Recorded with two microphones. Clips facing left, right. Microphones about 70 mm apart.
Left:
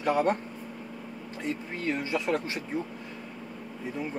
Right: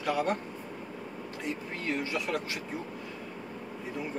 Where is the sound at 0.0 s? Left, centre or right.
Left.